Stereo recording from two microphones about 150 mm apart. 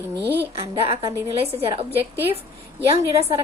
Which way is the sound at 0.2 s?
15° right (ahead or behind).